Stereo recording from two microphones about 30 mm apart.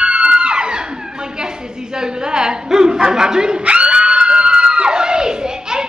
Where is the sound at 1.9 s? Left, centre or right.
Right.